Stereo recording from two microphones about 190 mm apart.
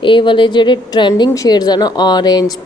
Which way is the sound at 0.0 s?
25° left (ahead or behind).